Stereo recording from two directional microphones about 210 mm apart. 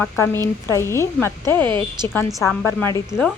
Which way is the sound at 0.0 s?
10° left (ahead or behind).